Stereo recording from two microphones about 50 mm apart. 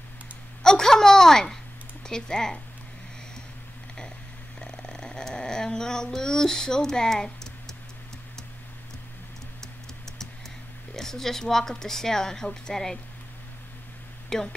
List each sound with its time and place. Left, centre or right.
0.6 s a sound: centre
2.0 s a woman's voice: centre
4.6 s a sound: centre
9.6 s typing: centre
11.0 s a woman's voice: centre
14.3 s a woman's voice: centre